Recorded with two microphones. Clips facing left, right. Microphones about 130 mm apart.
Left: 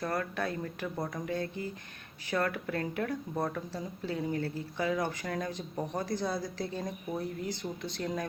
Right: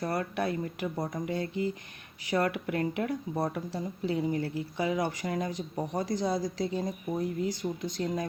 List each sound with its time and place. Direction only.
0.0 s speech: 15° right (ahead or behind)